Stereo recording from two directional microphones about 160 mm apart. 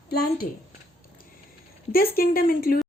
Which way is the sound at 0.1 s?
75° left (ahead or behind).